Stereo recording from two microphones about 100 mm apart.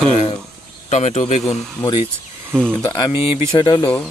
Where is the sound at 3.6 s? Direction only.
50° left (ahead or behind).